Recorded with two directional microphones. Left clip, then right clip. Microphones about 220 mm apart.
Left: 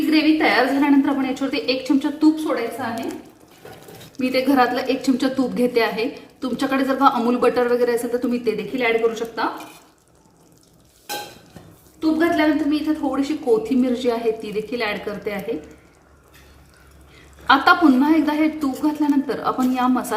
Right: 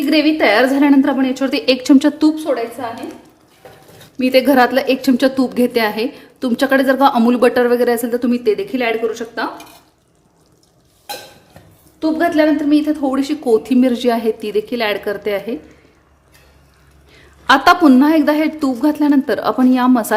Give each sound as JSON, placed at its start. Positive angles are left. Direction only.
{"t": 0.1, "sound": "a woman's voice", "side_deg": -55}
{"t": 4.2, "sound": "a woman's voice", "side_deg": -50}
{"t": 11.9, "sound": "a woman's voice", "side_deg": -50}
{"t": 17.4, "sound": "a woman's voice", "side_deg": -50}